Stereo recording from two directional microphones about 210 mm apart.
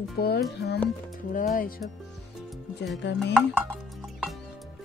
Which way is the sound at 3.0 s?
60° left (ahead or behind).